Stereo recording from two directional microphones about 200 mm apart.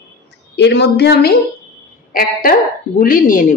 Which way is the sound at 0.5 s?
60° left (ahead or behind).